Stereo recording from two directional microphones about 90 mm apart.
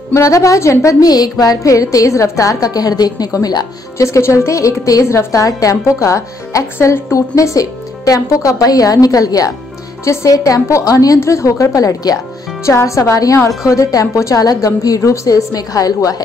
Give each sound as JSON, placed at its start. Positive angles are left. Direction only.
{"t": 0.1, "sound": "a woman's voice", "side_deg": 35}
{"t": 1.0, "sound": "a woman's voice", "side_deg": 45}